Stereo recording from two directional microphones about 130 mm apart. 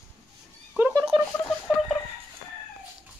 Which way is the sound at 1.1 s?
45° right (ahead or behind).